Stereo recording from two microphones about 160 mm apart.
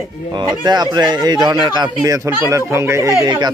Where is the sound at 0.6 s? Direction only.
25° right (ahead or behind).